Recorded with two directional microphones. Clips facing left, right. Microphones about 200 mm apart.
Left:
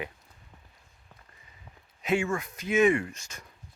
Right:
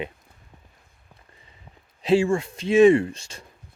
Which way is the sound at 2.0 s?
30° right (ahead or behind).